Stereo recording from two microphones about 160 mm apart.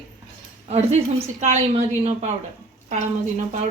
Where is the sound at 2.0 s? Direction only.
45° right (ahead or behind).